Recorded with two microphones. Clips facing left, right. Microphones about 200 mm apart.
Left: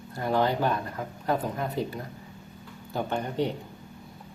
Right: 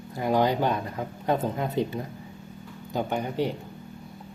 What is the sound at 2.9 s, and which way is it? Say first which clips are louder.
Speech: right 1 dB; 10° right (ahead or behind).